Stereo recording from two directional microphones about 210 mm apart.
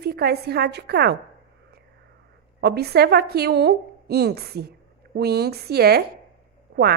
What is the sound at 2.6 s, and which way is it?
A woman's voice, 50° right (ahead or behind).